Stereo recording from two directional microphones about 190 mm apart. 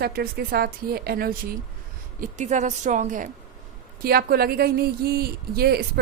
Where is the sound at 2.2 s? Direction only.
40° right (ahead or behind).